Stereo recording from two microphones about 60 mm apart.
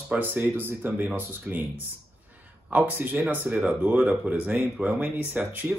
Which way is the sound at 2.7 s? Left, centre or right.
Right.